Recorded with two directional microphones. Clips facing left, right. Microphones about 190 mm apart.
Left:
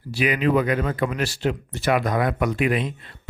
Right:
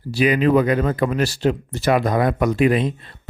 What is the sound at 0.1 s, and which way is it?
Speech, 35° right (ahead or behind).